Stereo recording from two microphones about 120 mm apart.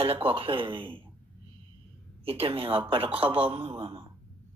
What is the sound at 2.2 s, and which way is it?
Speech, 50° right (ahead or behind).